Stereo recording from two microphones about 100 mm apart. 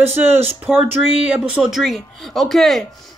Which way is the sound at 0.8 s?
10° right (ahead or behind).